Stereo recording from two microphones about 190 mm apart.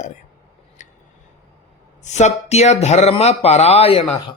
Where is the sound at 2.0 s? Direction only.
35° left (ahead or behind).